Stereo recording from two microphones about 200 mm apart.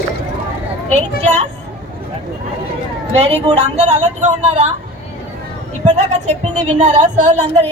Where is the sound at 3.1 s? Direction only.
30° right (ahead or behind).